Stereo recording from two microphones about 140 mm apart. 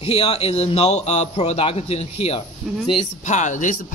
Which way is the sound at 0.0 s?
45° left (ahead or behind).